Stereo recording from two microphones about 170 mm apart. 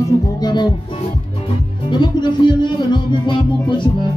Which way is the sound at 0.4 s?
25° left (ahead or behind).